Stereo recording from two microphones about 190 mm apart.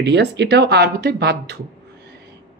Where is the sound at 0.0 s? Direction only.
65° right (ahead or behind).